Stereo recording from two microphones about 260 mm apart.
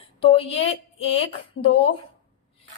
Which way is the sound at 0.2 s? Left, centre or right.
Left.